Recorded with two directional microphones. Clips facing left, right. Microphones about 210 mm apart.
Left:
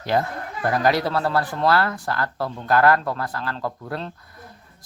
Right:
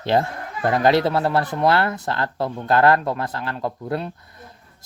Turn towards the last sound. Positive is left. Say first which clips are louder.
# right 4 dB
turn(degrees=-20)  # may be behind; listen again after turning